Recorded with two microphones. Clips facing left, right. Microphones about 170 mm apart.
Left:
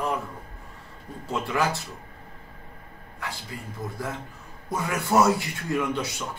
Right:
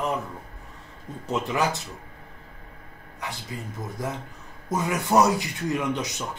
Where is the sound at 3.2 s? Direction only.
20° right (ahead or behind).